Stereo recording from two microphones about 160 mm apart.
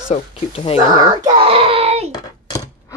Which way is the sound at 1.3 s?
35° right (ahead or behind).